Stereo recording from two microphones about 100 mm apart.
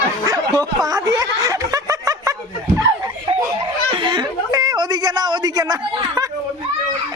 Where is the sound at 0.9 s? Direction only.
35° right (ahead or behind).